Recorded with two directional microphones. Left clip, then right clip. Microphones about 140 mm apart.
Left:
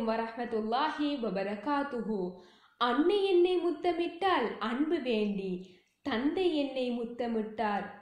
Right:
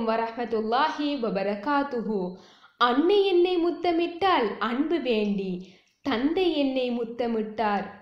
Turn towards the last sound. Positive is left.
turn(degrees=-40)  # may be behind; listen again after turning